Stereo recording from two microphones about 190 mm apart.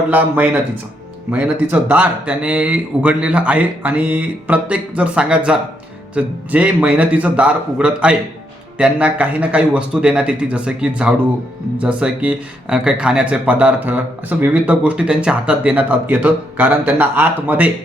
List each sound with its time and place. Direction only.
0.1 s speech: 10° right (ahead or behind)